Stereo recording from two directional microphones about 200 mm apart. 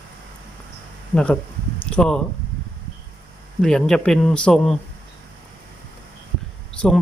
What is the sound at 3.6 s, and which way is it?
Speech, 5° left (ahead or behind).